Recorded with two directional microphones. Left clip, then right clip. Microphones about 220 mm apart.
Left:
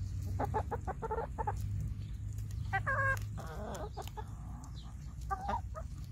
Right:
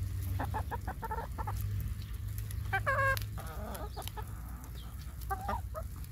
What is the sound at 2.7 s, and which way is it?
Rodents, 30° right (ahead or behind).